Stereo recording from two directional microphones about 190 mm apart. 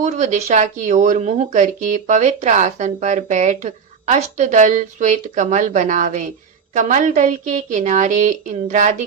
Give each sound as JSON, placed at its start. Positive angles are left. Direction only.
{"t": 0.0, "sound": "speech", "side_deg": -40}